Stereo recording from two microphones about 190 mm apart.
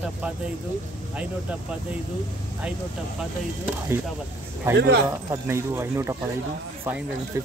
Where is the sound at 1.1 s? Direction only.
5° right (ahead or behind).